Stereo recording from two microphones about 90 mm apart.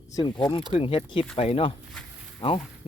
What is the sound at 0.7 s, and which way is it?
Speech, 85° left.